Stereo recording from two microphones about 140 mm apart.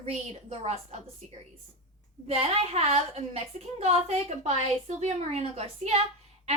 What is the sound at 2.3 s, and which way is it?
A woman's voice, 45° right (ahead or behind).